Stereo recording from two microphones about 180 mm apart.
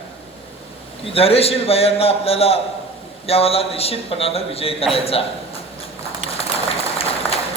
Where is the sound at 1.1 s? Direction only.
35° left (ahead or behind).